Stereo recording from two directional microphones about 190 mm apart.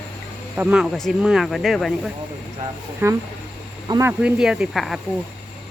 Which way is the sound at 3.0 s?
10° right (ahead or behind).